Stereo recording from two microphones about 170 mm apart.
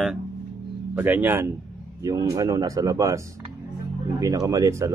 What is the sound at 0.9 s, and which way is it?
Speech, 10° right (ahead or behind).